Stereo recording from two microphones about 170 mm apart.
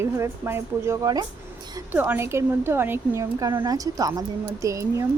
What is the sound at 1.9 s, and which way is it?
Speech, 10° right (ahead or behind).